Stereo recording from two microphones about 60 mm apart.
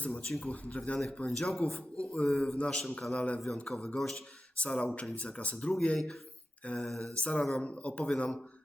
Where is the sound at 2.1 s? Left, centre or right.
Centre.